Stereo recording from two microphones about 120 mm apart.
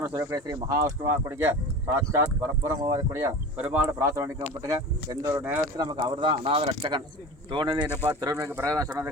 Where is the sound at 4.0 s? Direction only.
25° right (ahead or behind).